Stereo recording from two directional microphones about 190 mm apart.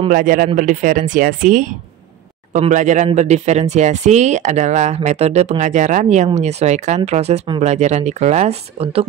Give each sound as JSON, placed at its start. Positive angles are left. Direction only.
{"t": 0.1, "sound": "speech", "side_deg": -45}